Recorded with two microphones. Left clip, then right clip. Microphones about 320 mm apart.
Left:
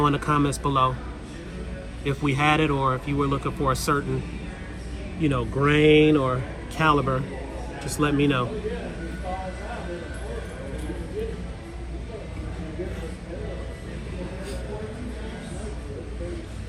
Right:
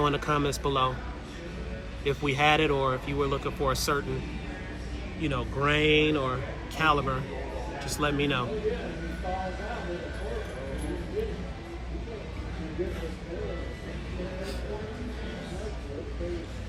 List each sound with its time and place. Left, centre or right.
0.0 s speech: centre
2.0 s speech: centre
5.2 s speech: centre